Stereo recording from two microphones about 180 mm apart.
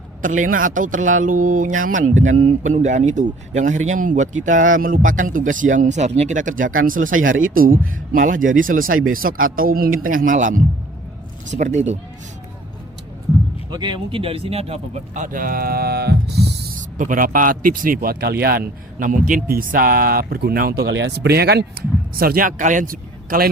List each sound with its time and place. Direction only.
0.2 s a woman's voice: 45° right (ahead or behind)
13.7 s a woman's voice: 25° right (ahead or behind); by 16.5 s 65° right (ahead or behind)
17.0 s a woman's voice: 50° right (ahead or behind)